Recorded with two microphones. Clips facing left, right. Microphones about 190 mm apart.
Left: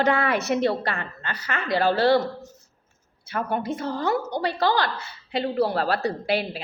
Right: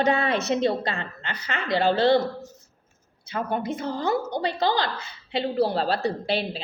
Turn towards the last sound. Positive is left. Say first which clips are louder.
# left 1 dB
turn(degrees=-25)  # may be behind; listen again after turning